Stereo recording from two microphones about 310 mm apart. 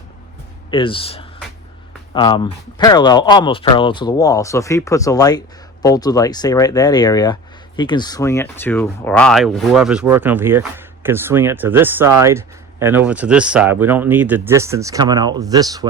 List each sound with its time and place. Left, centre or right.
0.7 s speech: centre